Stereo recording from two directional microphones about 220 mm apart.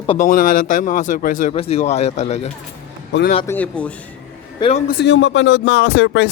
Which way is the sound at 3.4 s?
10° left (ahead or behind).